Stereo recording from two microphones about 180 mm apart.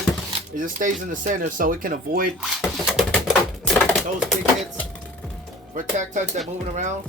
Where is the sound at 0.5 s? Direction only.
45° right (ahead or behind).